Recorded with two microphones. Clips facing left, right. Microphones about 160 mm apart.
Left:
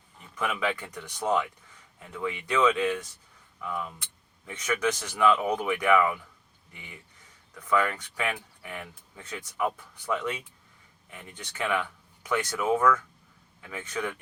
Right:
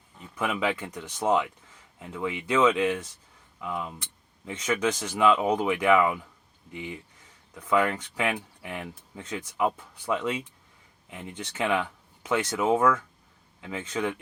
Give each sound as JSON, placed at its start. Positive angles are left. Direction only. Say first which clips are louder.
{"t": 0.3, "sound": "speech", "louder": "right 2 dB", "side_deg": -20}